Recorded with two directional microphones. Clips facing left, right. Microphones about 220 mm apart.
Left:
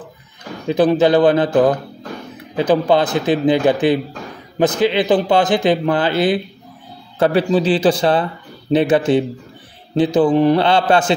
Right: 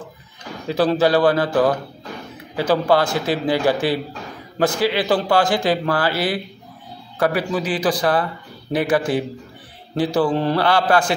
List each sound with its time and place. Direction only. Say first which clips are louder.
0.7 s a man's voice: left 4 dB; 20° left (ahead or behind)